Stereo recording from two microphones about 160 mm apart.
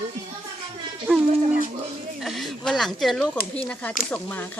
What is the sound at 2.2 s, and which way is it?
Speech, centre (ahead or behind).